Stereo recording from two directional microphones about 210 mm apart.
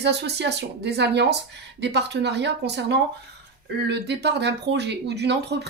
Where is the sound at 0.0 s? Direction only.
55° right (ahead or behind).